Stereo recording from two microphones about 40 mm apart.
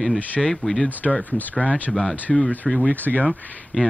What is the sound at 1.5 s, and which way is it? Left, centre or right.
Speech, left.